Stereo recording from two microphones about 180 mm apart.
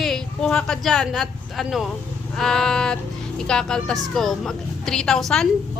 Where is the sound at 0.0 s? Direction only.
Centre (ahead or behind).